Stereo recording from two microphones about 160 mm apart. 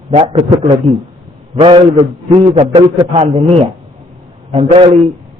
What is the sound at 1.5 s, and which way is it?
A man's voice, 35° right (ahead or behind).